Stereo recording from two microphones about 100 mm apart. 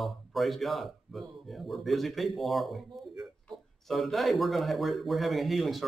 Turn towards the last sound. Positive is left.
turn(degrees=0)  # may be behind; listen again after turning